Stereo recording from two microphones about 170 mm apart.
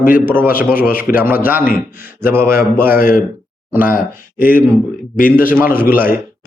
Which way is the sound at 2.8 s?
60° left (ahead or behind).